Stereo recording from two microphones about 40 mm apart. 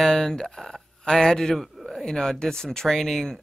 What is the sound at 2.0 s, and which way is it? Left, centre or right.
Speech, centre.